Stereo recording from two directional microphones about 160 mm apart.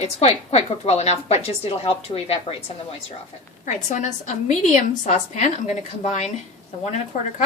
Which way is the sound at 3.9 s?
50° left (ahead or behind).